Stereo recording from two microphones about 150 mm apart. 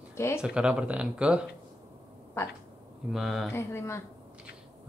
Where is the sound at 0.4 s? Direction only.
5° right (ahead or behind).